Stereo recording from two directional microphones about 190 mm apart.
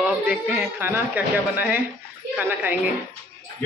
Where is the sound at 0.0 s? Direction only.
5° right (ahead or behind).